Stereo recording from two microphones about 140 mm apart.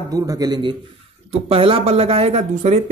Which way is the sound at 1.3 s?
40° right (ahead or behind).